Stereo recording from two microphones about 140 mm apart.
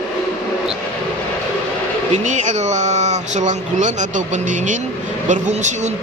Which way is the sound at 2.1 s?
60° right (ahead or behind).